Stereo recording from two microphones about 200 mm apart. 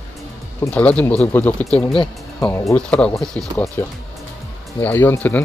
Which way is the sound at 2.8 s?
5° left (ahead or behind).